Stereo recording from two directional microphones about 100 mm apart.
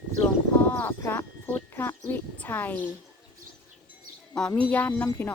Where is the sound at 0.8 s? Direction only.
20° left (ahead or behind).